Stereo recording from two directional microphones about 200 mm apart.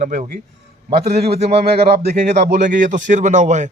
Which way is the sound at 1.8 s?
55° right (ahead or behind).